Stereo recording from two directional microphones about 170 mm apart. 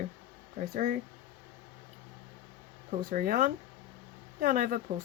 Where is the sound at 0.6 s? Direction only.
55° right (ahead or behind).